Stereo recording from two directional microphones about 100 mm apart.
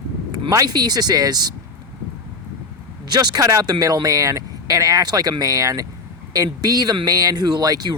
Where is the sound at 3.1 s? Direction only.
45° right (ahead or behind).